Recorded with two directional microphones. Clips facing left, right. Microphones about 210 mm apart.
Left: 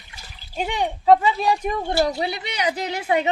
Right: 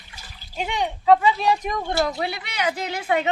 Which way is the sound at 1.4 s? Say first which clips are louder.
Even; 5° left (ahead or behind).